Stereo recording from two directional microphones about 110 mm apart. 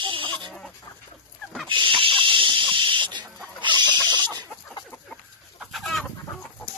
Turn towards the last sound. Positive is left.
turn(degrees=0)  # may be behind; listen again after turning